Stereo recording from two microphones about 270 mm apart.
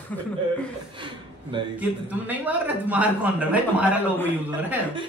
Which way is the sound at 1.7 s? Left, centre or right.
Centre.